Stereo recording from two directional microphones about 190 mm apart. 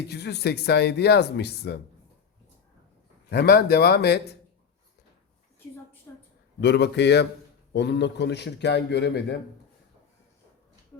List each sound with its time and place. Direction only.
0.1 s a man's voice: 60° left (ahead or behind)
3.2 s a man's voice: 55° left (ahead or behind)
6.6 s a man's voice: 65° left (ahead or behind)